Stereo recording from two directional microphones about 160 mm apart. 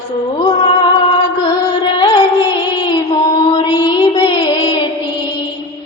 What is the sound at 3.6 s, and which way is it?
Music, 25° left (ahead or behind).